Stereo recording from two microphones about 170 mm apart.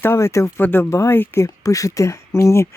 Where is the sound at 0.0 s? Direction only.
15° left (ahead or behind).